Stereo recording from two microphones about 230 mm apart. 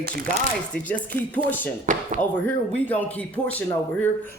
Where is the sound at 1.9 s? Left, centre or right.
Right.